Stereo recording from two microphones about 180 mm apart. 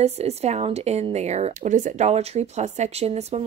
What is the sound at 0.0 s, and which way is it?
Speech, 35° right (ahead or behind).